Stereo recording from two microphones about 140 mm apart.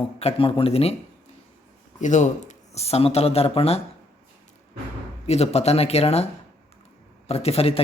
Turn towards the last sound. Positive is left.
turn(degrees=45)  # may be behind; listen again after turning